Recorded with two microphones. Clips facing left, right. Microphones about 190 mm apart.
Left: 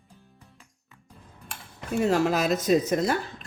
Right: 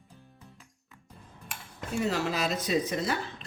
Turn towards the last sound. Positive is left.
turn(degrees=45)  # may be behind; listen again after turning